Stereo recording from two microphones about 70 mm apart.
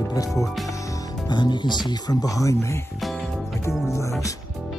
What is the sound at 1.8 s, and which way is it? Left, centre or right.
Speech, left.